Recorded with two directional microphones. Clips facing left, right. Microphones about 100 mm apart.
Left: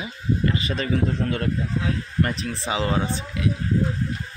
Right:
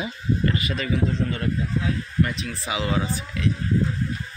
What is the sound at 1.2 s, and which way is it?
Speech, 65° left (ahead or behind).